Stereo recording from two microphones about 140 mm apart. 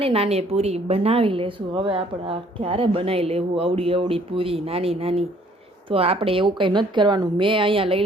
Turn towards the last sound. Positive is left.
turn(degrees=-40)  # may be behind; listen again after turning